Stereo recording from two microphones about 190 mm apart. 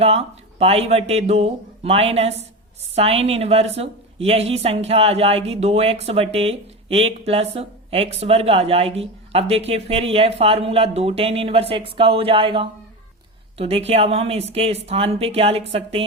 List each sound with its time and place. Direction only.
0.0 s a woman's voice: 30° right (ahead or behind)